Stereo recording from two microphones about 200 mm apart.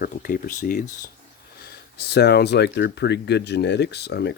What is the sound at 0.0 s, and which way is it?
Speech, 45° left (ahead or behind).